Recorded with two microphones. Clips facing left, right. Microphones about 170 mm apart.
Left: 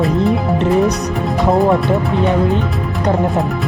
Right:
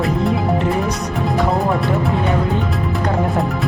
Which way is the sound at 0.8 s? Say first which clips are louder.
Left 5 dB; centre (ahead or behind).